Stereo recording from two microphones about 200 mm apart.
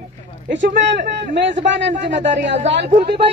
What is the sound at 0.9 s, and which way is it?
Speech, 55° right (ahead or behind).